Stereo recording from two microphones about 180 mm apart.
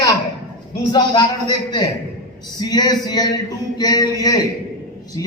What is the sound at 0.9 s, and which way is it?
A man's voice, 25° left (ahead or behind).